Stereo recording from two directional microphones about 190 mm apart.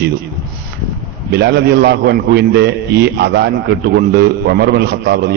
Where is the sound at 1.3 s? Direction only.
60° right (ahead or behind).